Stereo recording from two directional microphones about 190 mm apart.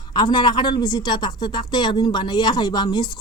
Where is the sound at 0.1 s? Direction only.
25° left (ahead or behind).